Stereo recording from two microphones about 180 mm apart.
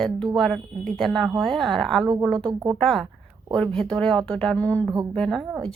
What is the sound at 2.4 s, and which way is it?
Speech, 25° right (ahead or behind).